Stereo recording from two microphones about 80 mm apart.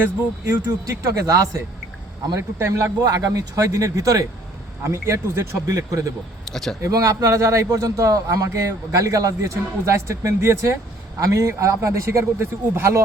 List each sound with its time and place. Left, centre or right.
0.0 s a man's voice: right
1.0 s speech: right
4.8 s a man's voice: right
6.4 s a sound: centre
6.8 s a man's voice: right